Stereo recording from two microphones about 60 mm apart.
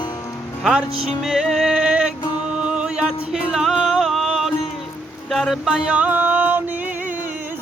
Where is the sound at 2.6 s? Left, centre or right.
Centre.